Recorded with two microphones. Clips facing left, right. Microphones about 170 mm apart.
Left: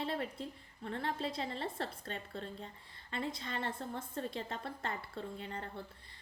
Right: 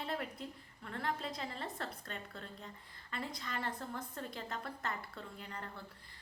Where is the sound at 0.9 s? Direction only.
30° left (ahead or behind).